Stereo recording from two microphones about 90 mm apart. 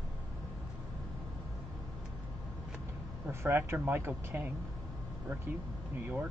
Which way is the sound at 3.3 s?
30° right (ahead or behind).